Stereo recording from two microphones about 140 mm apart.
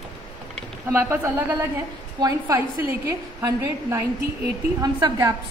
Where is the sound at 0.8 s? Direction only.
20° right (ahead or behind).